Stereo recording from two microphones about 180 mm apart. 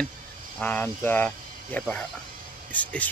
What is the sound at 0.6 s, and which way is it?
Speech, 10° left (ahead or behind).